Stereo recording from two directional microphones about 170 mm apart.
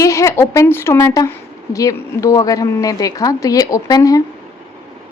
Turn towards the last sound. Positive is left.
turn(degrees=20)  # may be behind; listen again after turning